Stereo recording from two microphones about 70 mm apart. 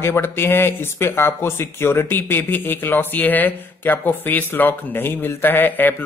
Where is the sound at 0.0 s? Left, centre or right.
Left.